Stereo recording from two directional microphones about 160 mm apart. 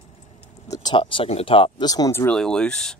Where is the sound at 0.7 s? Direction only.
25° left (ahead or behind).